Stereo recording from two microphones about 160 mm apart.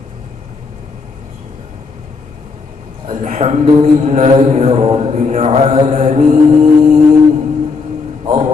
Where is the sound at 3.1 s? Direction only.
45° right (ahead or behind).